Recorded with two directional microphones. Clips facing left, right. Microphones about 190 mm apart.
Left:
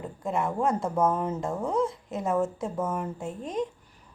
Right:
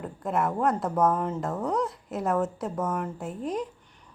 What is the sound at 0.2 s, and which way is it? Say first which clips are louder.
Speech: right 1 dB; centre (ahead or behind).